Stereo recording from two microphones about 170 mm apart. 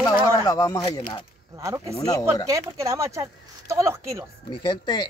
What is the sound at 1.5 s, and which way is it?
Speech, 20° right (ahead or behind).